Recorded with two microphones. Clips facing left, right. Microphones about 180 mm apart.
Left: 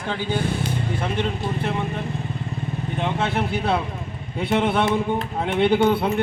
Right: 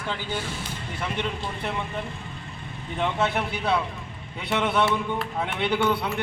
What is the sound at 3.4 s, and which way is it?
A man's voice, 50° left (ahead or behind).